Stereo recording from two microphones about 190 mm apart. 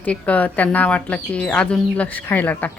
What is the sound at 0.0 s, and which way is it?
Speech, 5° left (ahead or behind).